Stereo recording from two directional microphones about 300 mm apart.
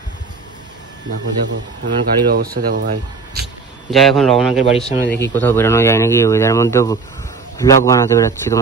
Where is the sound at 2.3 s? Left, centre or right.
Right.